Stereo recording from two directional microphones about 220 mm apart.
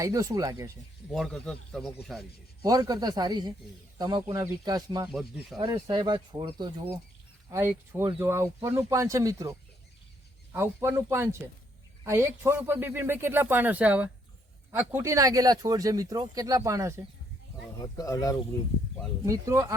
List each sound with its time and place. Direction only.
0.0 s speech: 15° right (ahead or behind)
1.1 s a man's voice: centre (ahead or behind)
2.6 s speech: 15° right (ahead or behind)
7.5 s speech: 10° right (ahead or behind)
17.8 s speech: 15° left (ahead or behind)
19.2 s speech: 15° right (ahead or behind)